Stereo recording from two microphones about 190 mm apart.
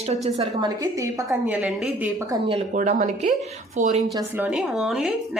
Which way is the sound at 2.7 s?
40° right (ahead or behind).